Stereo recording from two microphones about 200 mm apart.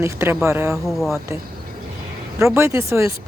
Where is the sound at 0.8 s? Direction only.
Centre (ahead or behind).